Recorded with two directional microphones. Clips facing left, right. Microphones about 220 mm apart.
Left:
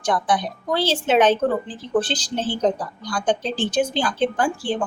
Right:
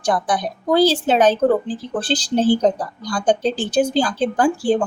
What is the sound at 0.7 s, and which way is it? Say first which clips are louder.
Speech: right 5 dB; 35° right (ahead or behind).